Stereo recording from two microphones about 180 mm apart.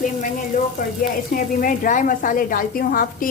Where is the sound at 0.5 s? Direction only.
45° left (ahead or behind).